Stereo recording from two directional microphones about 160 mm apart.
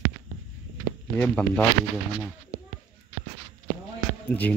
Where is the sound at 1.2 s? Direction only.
10° left (ahead or behind).